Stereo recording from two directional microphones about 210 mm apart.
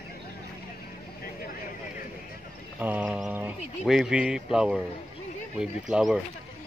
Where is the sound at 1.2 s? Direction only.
45° left (ahead or behind).